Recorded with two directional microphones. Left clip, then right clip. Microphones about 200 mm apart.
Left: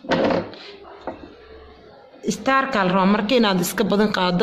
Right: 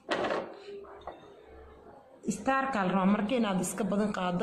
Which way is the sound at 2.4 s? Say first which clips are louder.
Left 10 dB; 50° left (ahead or behind).